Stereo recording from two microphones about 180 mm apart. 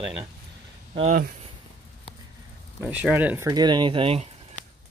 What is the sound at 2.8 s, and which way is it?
Speech, 5° right (ahead or behind).